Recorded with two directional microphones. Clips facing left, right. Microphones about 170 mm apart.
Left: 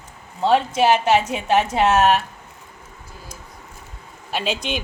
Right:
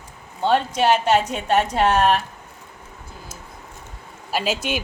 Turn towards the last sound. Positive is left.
turn(degrees=-5)  # may be behind; listen again after turning